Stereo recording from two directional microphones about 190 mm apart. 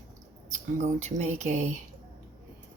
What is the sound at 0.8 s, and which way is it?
Speech, 35° right (ahead or behind).